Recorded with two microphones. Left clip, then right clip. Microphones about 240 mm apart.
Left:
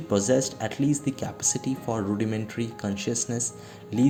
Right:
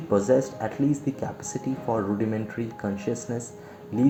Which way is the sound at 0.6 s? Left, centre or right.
Left.